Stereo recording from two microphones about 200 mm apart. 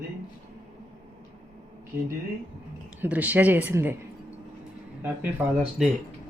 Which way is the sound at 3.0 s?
10° right (ahead or behind).